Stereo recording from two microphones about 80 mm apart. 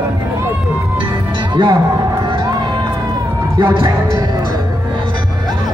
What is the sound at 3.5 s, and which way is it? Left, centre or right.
Speech, right.